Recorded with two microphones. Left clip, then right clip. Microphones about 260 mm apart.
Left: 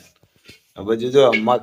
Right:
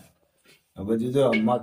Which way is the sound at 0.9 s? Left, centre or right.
Centre.